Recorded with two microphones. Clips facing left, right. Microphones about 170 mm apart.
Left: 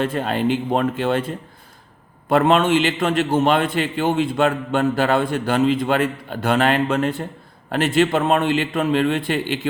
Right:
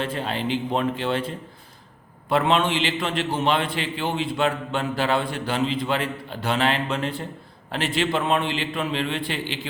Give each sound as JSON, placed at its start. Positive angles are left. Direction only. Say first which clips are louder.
{"t": 0.0, "sound": "a man's voice", "louder": "left 6 dB", "side_deg": 50}
{"t": 2.3, "sound": "a man's voice", "louder": "left 5 dB", "side_deg": 45}